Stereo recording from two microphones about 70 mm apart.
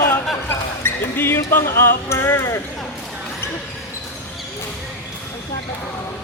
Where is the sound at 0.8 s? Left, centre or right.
Left.